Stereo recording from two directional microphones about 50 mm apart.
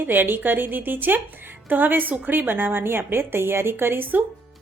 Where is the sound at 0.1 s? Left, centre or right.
Right.